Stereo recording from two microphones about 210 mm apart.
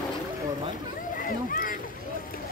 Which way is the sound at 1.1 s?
40° left (ahead or behind).